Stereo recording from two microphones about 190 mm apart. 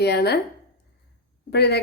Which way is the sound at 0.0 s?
60° left (ahead or behind).